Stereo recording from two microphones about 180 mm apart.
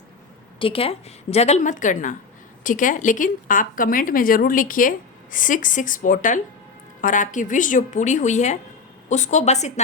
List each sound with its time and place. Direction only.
0.6 s a woman's voice: 30° left (ahead or behind)